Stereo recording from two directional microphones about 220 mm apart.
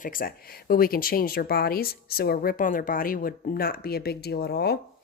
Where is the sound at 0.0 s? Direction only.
40° left (ahead or behind).